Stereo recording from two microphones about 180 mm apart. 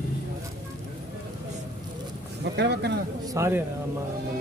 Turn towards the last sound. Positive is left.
turn(degrees=-15)  # may be behind; listen again after turning